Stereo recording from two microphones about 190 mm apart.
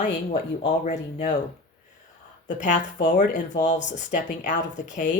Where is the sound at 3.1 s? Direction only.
40° left (ahead or behind).